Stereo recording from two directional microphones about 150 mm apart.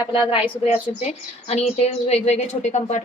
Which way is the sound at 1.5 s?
45° left (ahead or behind).